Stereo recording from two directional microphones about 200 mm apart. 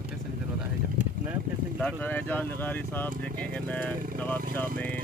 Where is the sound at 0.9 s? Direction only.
5° right (ahead or behind).